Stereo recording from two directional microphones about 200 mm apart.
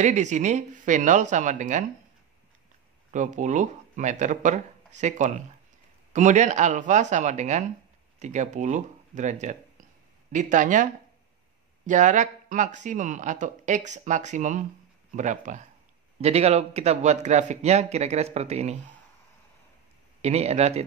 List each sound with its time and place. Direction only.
0.0 s speech: 35° right (ahead or behind)
3.1 s speech: 40° right (ahead or behind)
20.2 s speech: 30° right (ahead or behind)